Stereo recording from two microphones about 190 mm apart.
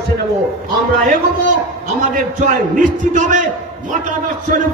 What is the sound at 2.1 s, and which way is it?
A man's voice, 45° right (ahead or behind).